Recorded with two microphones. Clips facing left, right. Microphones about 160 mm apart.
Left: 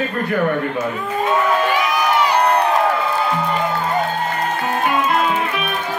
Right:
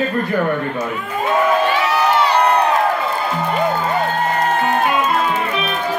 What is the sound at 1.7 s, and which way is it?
Run, 10° left (ahead or behind).